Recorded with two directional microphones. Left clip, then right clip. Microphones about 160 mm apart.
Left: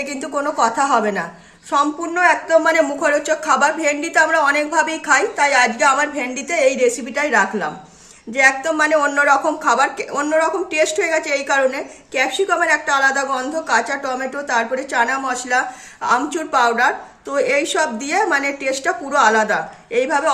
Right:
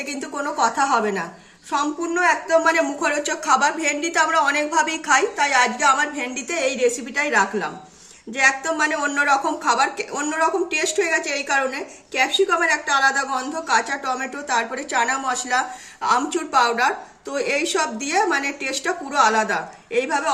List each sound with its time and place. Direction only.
0.0 s a woman's voice: 20° right (ahead or behind)